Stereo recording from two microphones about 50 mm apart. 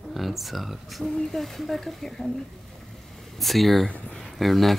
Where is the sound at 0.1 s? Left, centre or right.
Centre.